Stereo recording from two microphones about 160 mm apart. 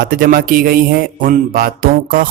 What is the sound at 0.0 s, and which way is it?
A man's voice, 65° right (ahead or behind).